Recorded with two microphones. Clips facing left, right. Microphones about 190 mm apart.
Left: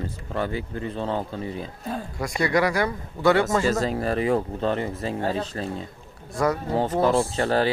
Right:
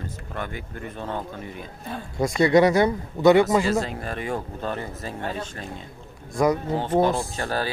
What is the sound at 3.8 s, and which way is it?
Speech, 35° left (ahead or behind).